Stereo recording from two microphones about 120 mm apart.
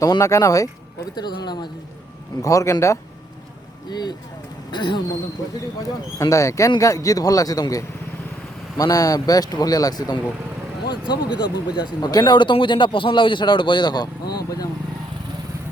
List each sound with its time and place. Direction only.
0.0 s speech: 25° left (ahead or behind)
3.8 s speech: 35° left (ahead or behind)
6.1 s speech: 25° left (ahead or behind)